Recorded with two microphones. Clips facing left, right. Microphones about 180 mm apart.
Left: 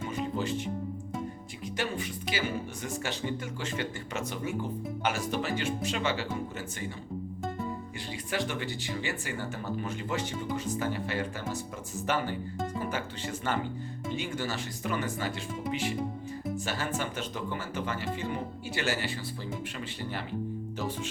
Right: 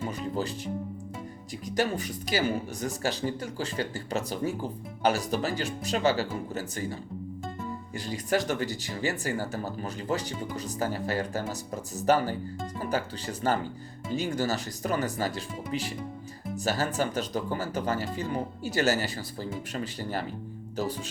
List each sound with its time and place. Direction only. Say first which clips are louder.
0.3 s speech: even; 35° right (ahead or behind)
7.9 s speech: right 8 dB; 40° right (ahead or behind)